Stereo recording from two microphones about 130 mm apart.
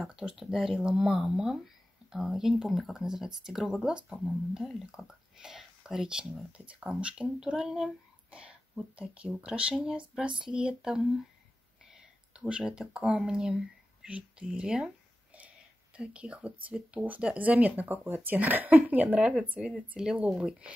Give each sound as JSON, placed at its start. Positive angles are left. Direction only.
{"t": 0.0, "sound": "speech", "side_deg": -10}
{"t": 16.0, "sound": "speech", "side_deg": -10}